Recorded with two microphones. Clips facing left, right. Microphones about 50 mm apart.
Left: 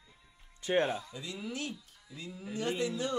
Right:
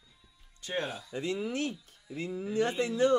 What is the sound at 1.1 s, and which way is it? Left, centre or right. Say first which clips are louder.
Speech: right 7 dB; right.